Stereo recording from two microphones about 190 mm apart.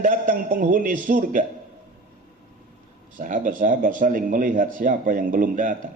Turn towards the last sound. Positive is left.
turn(degrees=-45)  # may be behind; listen again after turning